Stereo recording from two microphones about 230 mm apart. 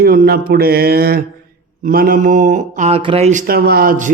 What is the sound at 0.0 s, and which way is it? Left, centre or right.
Speech, right.